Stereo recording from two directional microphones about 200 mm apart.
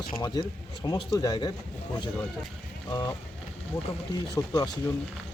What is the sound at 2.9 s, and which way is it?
Speech, 20° left (ahead or behind).